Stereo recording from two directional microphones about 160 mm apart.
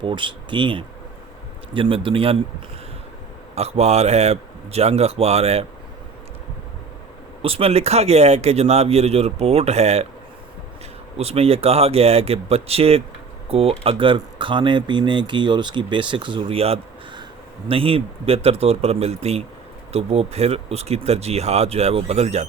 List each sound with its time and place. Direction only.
0.0 s speech: 30° right (ahead or behind)
3.5 s speech: 40° right (ahead or behind)
7.4 s speech: 35° right (ahead or behind)
11.2 s speech: 40° right (ahead or behind)